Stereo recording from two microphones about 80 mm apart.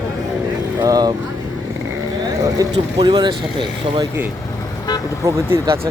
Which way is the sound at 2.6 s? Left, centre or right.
Right.